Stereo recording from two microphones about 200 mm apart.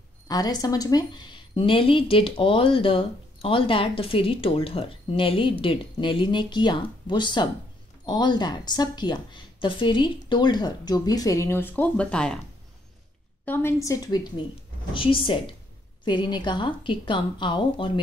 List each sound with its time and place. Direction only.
0.3 s a woman's voice: 20° left (ahead or behind)
13.5 s a woman's voice: 10° left (ahead or behind)